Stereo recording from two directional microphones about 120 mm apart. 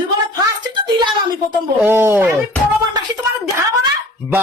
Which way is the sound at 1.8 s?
20° right (ahead or behind).